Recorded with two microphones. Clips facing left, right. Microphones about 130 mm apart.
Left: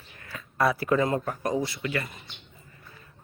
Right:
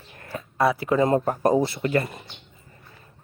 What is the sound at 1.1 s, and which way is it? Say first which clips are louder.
Speech: right 7 dB; 35° right (ahead or behind).